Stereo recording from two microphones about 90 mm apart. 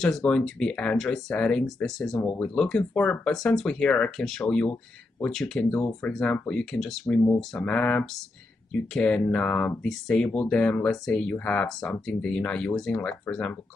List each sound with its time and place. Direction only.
0.0 s speech: 10° left (ahead or behind)